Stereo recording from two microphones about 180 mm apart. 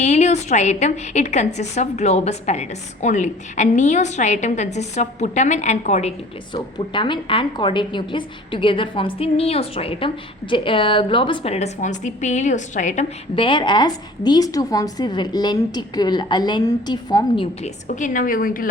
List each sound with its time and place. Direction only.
0.0 s a woman's voice: 40° left (ahead or behind)
13.3 s a woman's voice: 30° left (ahead or behind)
17.8 s a woman's voice: 45° left (ahead or behind)